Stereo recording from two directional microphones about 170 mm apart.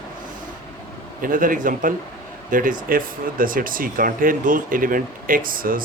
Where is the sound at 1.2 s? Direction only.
50° right (ahead or behind).